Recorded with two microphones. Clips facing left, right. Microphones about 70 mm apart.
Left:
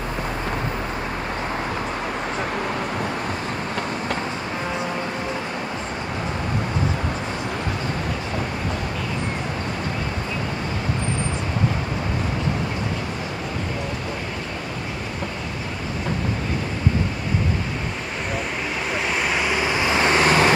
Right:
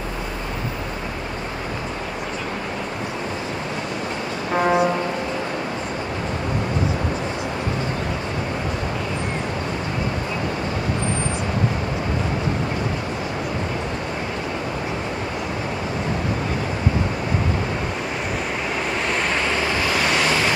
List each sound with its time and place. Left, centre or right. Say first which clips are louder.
19.4 s vehicle: even; centre; by 20.5 s left